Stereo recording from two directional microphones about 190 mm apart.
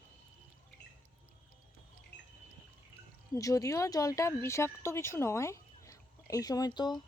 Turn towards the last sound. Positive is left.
turn(degrees=20)  # may be behind; listen again after turning